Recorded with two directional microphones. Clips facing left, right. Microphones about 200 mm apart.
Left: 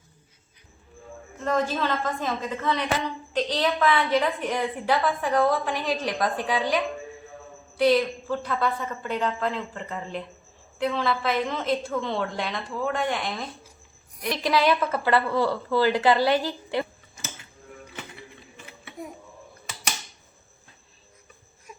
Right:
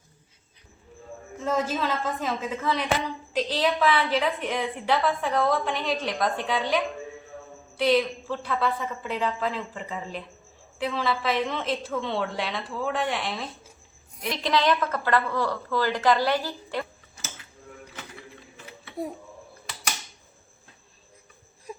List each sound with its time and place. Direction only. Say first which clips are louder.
1.5 s a woman's voice: left 1 dB; 5° right (ahead or behind); by 16.8 s 15° left (ahead or behind)
21.7 s baby cry: right 8 dB; 30° right (ahead or behind)